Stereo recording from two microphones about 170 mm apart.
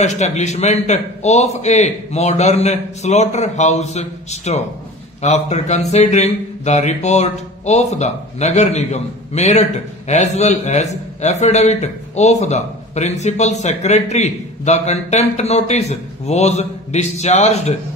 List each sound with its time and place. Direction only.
0.0 s speech: 40° left (ahead or behind)